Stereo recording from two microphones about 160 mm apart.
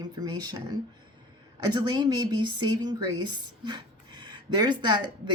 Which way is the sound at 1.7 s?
30° right (ahead or behind).